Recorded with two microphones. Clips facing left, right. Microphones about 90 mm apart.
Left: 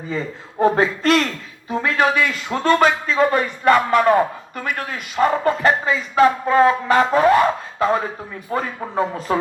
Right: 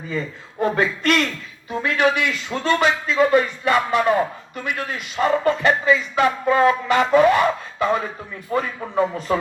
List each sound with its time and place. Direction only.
0.1 s speech: 35° left (ahead or behind)